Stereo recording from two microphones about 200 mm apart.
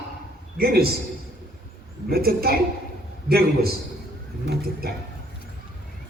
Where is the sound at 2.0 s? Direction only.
50° right (ahead or behind).